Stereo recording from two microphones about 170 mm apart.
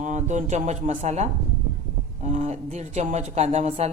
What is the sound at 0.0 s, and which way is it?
A woman's voice, 45° right (ahead or behind).